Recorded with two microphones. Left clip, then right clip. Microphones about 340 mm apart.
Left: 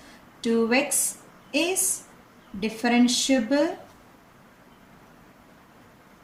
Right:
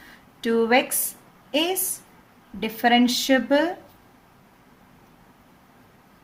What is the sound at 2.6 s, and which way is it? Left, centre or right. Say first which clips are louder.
A woman's voice: right 4 dB; right.